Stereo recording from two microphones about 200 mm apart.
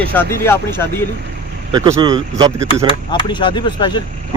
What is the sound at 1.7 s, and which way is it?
Speech, 20° right (ahead or behind).